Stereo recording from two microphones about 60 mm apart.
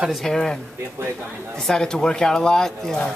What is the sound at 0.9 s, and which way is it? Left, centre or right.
Speech, right.